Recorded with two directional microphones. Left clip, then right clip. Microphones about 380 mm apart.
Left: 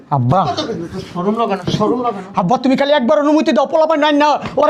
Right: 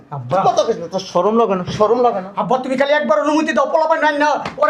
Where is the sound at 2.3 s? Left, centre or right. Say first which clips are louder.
Left 2 dB; left.